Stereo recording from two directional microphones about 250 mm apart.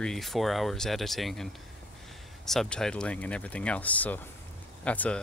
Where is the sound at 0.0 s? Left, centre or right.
Centre.